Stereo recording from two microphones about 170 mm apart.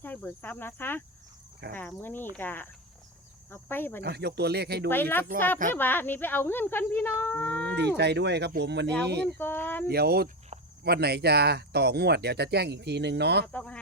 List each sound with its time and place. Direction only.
0.0 s cricket: 10° left (ahead or behind)
1.7 s speech: 10° left (ahead or behind)
4.0 s speech: 75° right (ahead or behind)
4.9 s speech: 10° left (ahead or behind)
7.8 s speech: 80° right
9.4 s speech: 10° left (ahead or behind)
9.8 s speech: 65° right (ahead or behind)
13.5 s speech: 10° left (ahead or behind)